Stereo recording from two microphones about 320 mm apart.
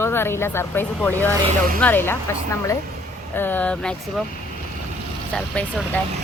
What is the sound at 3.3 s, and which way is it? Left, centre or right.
Speech, centre.